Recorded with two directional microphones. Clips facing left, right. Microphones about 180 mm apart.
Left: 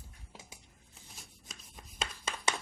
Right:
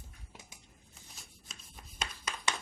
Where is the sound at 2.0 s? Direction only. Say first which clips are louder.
Left 2 dB; 25° left (ahead or behind).